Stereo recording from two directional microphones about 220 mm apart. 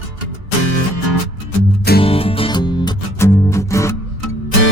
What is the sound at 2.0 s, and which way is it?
Music, 25° left (ahead or behind).